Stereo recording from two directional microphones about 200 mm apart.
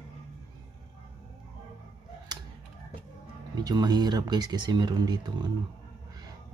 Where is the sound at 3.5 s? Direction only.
20° right (ahead or behind).